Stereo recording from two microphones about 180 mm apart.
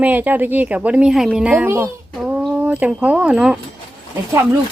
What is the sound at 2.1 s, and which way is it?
Speech, centre (ahead or behind).